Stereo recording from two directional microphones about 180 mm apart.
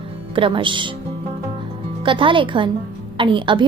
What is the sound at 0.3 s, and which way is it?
Speech, 30° right (ahead or behind).